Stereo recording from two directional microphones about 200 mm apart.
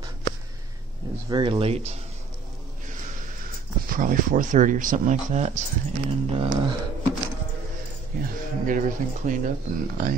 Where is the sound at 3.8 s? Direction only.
45° right (ahead or behind).